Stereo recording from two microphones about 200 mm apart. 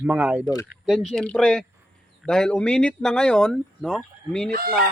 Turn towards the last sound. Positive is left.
turn(degrees=-45)  # may be behind; listen again after turning